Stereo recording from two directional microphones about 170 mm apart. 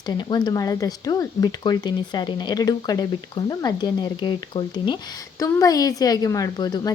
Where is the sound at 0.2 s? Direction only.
25° left (ahead or behind).